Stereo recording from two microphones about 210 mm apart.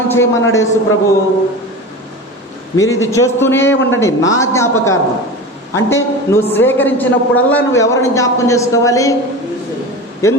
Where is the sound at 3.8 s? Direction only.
65° left (ahead or behind).